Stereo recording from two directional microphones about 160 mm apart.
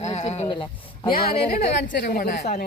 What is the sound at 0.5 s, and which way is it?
Speech, 30° left (ahead or behind).